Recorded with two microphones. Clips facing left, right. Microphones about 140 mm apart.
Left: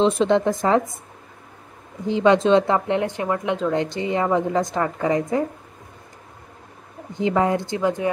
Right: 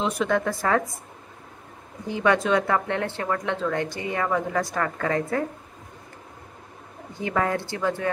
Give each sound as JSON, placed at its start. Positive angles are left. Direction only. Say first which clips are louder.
{"t": 0.0, "sound": "a woman's voice", "louder": "left 6 dB", "side_deg": 25}
{"t": 2.0, "sound": "a woman's voice", "louder": "left 6 dB", "side_deg": 20}
{"t": 7.2, "sound": "a woman's voice", "louder": "left 5 dB", "side_deg": 20}